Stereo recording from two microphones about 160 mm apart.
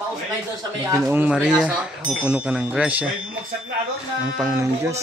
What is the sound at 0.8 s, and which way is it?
Speech, 20° right (ahead or behind).